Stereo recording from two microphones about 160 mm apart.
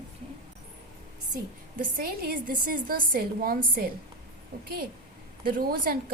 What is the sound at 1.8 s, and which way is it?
A woman's voice, 65° right (ahead or behind).